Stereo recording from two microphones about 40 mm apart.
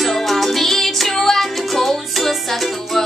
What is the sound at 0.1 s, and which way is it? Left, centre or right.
Music, centre.